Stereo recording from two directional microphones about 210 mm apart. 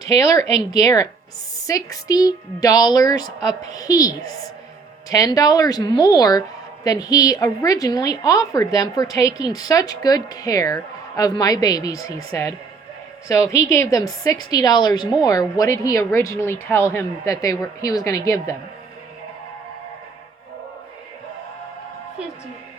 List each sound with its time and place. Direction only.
0.0 s a woman's voice: 15° left (ahead or behind)